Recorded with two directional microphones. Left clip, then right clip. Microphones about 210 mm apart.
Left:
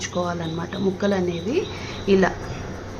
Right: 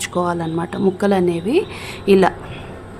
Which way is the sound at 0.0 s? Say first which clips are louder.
Right 5 dB; 60° right (ahead or behind).